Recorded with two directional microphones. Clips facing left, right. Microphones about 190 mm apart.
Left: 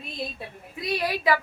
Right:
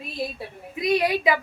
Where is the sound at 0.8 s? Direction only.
20° right (ahead or behind).